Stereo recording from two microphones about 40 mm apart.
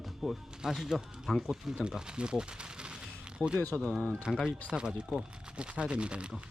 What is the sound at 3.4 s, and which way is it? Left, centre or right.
Speech, left.